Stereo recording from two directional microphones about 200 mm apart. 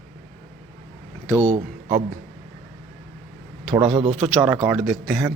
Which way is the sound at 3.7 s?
25° right (ahead or behind).